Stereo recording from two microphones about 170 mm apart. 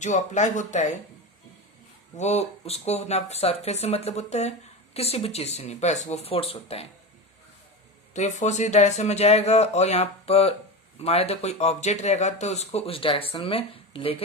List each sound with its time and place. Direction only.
0.0 s speech: 45° left (ahead or behind)
2.1 s speech: 40° left (ahead or behind)
8.1 s speech: 45° left (ahead or behind)